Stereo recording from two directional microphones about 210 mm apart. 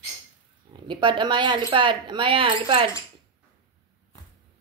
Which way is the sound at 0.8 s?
20° right (ahead or behind).